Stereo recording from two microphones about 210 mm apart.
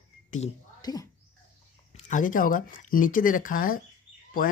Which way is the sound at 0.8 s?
20° left (ahead or behind).